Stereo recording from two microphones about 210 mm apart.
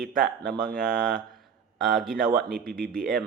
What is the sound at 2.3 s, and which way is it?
Speech, 45° right (ahead or behind).